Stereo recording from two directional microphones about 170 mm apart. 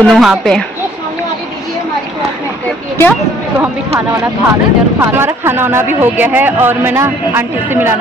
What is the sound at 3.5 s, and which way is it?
Speech, 15° right (ahead or behind).